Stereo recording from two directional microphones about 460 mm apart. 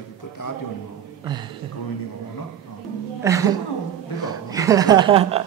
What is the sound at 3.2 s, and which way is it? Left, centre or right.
Speech, centre.